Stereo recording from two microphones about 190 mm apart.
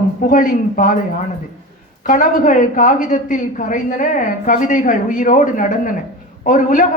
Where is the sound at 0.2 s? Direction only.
45° left (ahead or behind).